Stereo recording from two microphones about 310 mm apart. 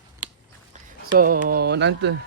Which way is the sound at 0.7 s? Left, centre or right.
Right.